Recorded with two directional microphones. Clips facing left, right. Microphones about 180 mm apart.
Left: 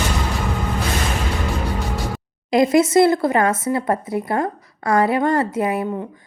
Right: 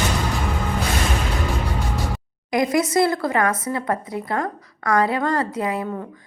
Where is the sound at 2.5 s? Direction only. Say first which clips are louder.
Left 5 dB; 25° left (ahead or behind).